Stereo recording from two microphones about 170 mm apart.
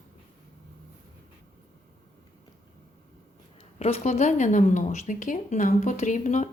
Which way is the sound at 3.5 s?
35° left (ahead or behind).